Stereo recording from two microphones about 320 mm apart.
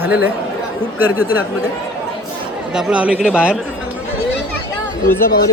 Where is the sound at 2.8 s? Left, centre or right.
Centre.